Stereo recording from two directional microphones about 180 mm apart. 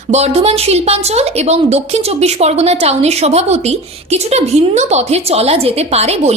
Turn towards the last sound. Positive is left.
turn(degrees=-35)  # may be behind; listen again after turning